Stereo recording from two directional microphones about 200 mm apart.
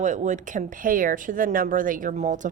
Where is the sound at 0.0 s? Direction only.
40° right (ahead or behind).